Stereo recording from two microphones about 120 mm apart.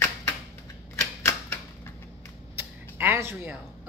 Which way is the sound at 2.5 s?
20° right (ahead or behind).